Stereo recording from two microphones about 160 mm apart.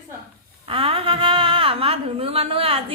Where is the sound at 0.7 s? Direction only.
35° right (ahead or behind).